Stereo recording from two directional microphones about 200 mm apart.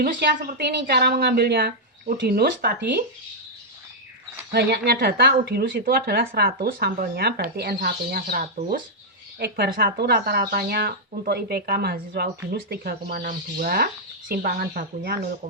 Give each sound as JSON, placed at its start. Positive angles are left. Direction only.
{"t": 0.0, "sound": "speech", "side_deg": -55}
{"t": 4.5, "sound": "speech", "side_deg": -55}